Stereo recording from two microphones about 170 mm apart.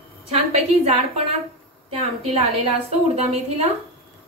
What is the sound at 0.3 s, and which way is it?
A woman's voice, 35° right (ahead or behind).